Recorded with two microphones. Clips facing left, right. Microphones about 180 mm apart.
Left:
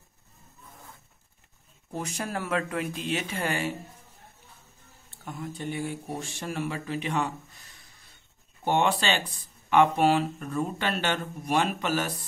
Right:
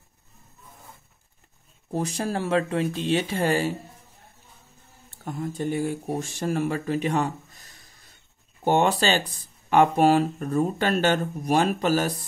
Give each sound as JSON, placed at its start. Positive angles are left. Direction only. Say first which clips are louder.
{"t": 1.9, "sound": "speech", "louder": "right 6 dB", "side_deg": -35}
{"t": 5.1, "sound": "speech", "louder": "right 6 dB", "side_deg": -40}